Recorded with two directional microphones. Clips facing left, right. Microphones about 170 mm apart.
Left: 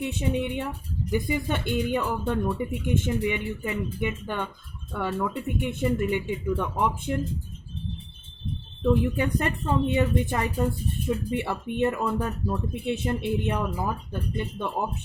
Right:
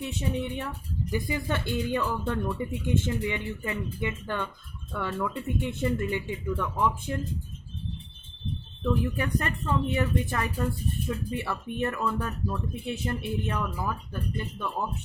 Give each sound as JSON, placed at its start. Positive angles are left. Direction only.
{"t": 0.0, "sound": "a woman's voice", "side_deg": 20}
{"t": 8.8, "sound": "a woman's voice", "side_deg": 20}